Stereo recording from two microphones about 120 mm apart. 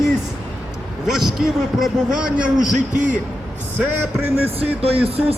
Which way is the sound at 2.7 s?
90° right.